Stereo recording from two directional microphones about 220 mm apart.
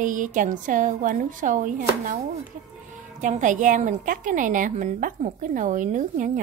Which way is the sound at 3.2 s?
35° right (ahead or behind).